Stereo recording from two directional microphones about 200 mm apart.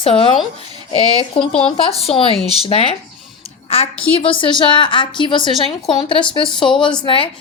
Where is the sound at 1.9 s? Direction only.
30° left (ahead or behind).